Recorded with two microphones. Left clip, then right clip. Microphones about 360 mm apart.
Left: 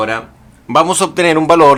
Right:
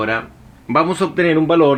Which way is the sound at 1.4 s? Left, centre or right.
Left.